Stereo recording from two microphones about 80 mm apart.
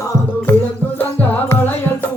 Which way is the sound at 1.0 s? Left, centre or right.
Left.